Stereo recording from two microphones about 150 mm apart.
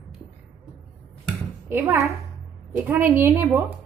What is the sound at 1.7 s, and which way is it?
A woman's voice, 15° right (ahead or behind).